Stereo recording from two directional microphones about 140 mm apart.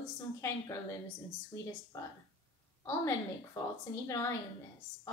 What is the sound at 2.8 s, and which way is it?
Speech, 20° left (ahead or behind).